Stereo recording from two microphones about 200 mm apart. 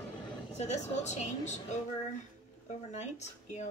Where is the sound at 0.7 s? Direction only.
35° left (ahead or behind).